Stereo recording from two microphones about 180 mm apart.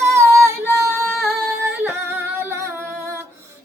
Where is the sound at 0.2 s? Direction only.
15° right (ahead or behind).